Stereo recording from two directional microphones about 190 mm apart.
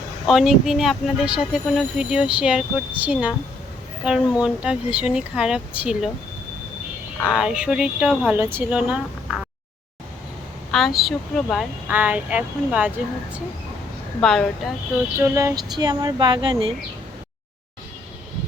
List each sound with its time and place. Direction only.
0.3 s speech: centre (ahead or behind)
7.3 s speech: 5° right (ahead or behind)
10.7 s speech: centre (ahead or behind)
14.2 s speech: 5° left (ahead or behind)
15.2 s speech: 15° right (ahead or behind)